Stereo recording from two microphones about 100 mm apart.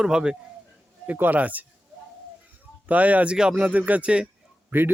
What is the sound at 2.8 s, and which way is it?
Speech, 15° right (ahead or behind).